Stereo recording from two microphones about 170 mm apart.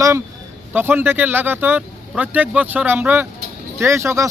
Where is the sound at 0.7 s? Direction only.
10° right (ahead or behind).